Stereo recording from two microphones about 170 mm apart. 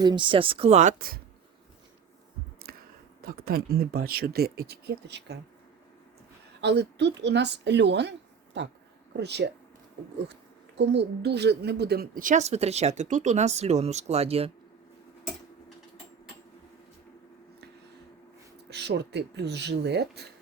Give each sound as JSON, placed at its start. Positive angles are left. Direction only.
{"t": 0.0, "sound": "a woman's voice", "side_deg": -25}
{"t": 2.6, "sound": "a sound", "side_deg": -60}
{"t": 3.2, "sound": "speech", "side_deg": -60}
{"t": 6.6, "sound": "a woman's voice", "side_deg": -85}
{"t": 10.8, "sound": "a woman's voice", "side_deg": -85}
{"t": 18.7, "sound": "speech", "side_deg": -80}